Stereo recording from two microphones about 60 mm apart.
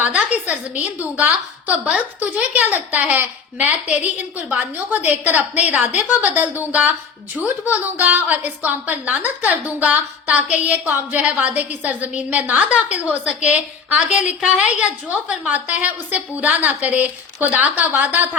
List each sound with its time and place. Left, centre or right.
0.0 s a woman's voice: right